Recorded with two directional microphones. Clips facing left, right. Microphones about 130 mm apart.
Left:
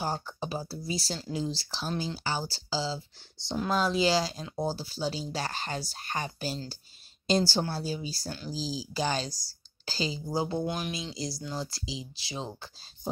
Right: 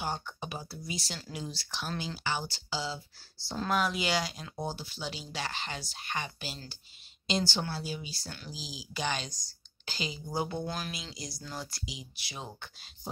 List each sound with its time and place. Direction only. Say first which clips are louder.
0.0 s speech: left 3 dB; 35° left (ahead or behind)